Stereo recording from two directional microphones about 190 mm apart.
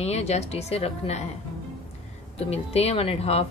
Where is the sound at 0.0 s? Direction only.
35° left (ahead or behind).